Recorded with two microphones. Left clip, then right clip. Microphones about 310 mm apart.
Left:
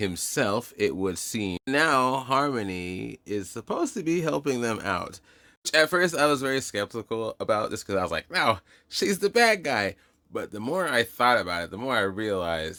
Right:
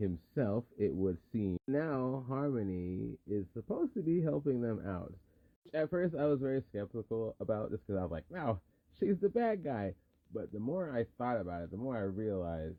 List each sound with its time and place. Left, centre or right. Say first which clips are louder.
0.3 s speech: left 10 dB; centre
2.7 s speech: left 8 dB; left
3.3 s speech: left 9 dB; centre
7.1 s speech: left 4 dB; left
7.3 s speech: left 11 dB; centre